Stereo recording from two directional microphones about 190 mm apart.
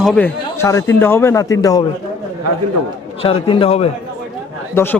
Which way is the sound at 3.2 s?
30° left (ahead or behind).